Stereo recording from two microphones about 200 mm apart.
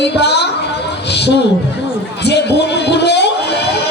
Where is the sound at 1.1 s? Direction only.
55° left (ahead or behind).